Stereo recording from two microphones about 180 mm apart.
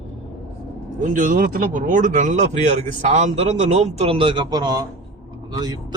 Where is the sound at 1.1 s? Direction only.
50° right (ahead or behind); by 5.9 s 20° right (ahead or behind).